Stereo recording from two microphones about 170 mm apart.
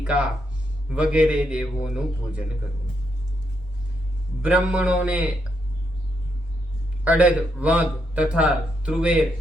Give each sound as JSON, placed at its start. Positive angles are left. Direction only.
{"t": 0.0, "sound": "a man's voice", "side_deg": -5}
{"t": 4.4, "sound": "speech", "side_deg": -5}
{"t": 7.0, "sound": "speech", "side_deg": -10}